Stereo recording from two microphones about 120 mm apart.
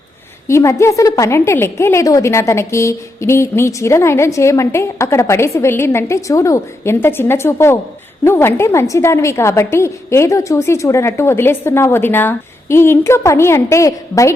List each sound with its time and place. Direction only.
0.4 s a woman's voice: 25° left (ahead or behind)